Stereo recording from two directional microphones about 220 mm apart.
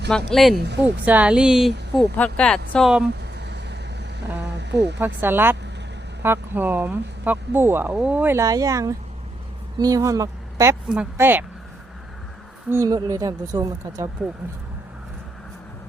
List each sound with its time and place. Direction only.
0.1 s speech: centre (ahead or behind)
0.5 s speech: 50° right (ahead or behind)
1.0 s speech: 5° right (ahead or behind)
3.3 s vehicle: 50° right (ahead or behind)
4.5 s a sound: 50° right (ahead or behind)
4.9 s speech: 10° right (ahead or behind)
12.7 s speech: 15° right (ahead or behind)